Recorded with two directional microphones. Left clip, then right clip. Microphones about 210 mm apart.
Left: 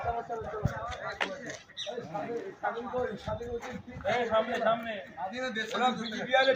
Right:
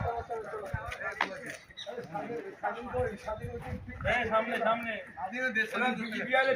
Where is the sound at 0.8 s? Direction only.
10° right (ahead or behind).